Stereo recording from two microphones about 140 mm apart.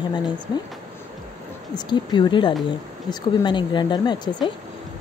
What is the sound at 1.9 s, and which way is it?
Speech, 30° left (ahead or behind).